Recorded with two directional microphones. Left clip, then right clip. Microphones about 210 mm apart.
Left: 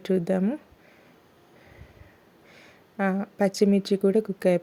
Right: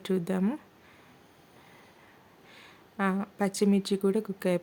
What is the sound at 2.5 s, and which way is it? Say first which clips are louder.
A woman's voice: left 3 dB; 10° left (ahead or behind).